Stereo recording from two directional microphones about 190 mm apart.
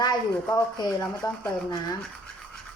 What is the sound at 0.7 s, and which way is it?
Speech, 20° left (ahead or behind).